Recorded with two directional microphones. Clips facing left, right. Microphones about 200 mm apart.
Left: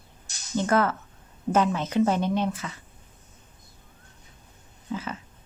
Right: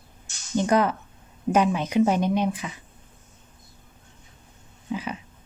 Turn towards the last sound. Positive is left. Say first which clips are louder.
# right 2 dB
turn(degrees=-15)  # may be behind; listen again after turning